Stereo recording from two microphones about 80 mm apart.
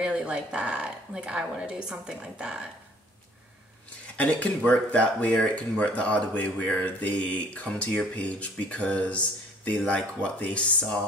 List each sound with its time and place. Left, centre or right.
0.0 s speech: centre
4.2 s speech: centre